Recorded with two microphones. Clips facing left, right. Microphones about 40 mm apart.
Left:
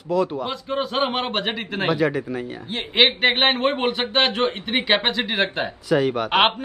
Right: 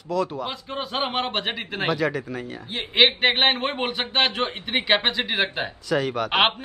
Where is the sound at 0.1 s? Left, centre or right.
Centre.